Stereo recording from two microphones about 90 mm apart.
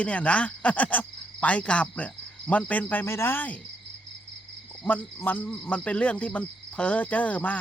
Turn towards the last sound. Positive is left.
turn(degrees=20)  # may be behind; listen again after turning